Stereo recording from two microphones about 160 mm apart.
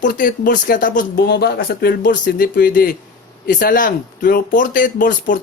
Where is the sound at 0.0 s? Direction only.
60° left (ahead or behind); by 2.0 s 80° left.